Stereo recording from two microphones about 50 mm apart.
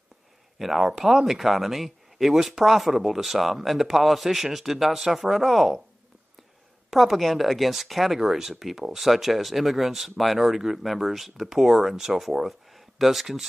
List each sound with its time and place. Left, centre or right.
0.6 s speech: centre
6.9 s speech: centre